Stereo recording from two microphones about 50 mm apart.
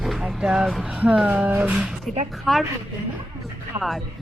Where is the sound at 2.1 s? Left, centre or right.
Centre.